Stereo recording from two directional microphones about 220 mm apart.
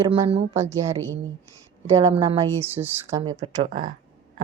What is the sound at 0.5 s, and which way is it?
Speech, 10° right (ahead or behind).